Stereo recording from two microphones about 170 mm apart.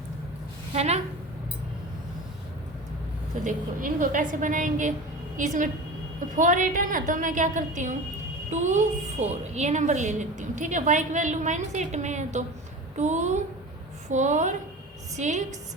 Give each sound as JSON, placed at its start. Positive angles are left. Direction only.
{"t": 0.7, "sound": "a woman's voice", "side_deg": -40}
{"t": 3.4, "sound": "a woman's voice", "side_deg": -55}